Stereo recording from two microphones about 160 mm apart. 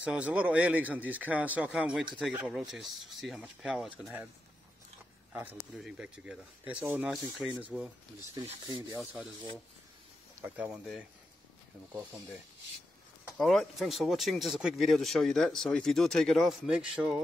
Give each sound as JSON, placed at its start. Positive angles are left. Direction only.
{"t": 0.0, "sound": "speech", "side_deg": -5}
{"t": 5.3, "sound": "speech", "side_deg": -10}
{"t": 8.4, "sound": "speech", "side_deg": -25}
{"t": 8.9, "sound": "speech", "side_deg": -10}
{"t": 10.4, "sound": "speech", "side_deg": -5}
{"t": 13.4, "sound": "speech", "side_deg": 0}